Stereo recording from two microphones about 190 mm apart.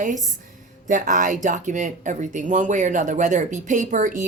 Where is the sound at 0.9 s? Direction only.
45° right (ahead or behind).